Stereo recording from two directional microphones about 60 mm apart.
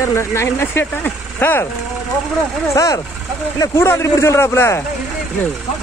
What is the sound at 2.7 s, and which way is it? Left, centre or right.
Speech, left.